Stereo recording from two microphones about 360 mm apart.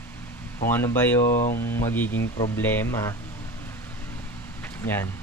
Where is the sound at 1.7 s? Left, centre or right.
Centre.